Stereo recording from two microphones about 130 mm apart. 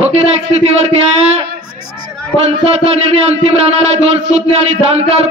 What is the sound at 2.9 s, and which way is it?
Speech, 55° right (ahead or behind).